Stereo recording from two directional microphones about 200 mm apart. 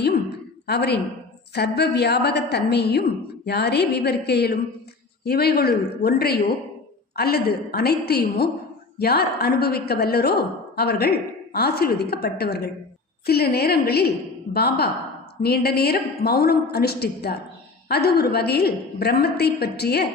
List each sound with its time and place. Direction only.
0.7 s a woman's voice: 55° left (ahead or behind)